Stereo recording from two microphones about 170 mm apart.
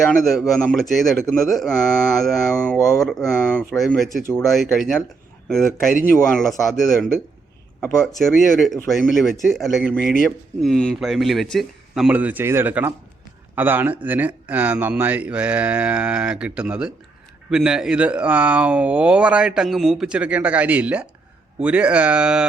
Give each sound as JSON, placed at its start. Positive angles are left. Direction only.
{"t": 0.1, "sound": "speech", "side_deg": 0}